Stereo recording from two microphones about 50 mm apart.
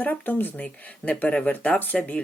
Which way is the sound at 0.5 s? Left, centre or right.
Left.